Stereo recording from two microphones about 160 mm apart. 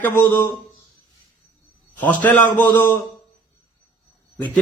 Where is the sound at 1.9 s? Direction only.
10° left (ahead or behind).